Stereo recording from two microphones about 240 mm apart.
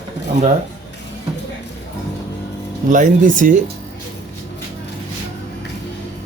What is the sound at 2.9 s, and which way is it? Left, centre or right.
Speech, right.